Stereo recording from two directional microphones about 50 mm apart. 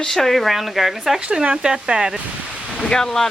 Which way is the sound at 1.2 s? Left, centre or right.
Right.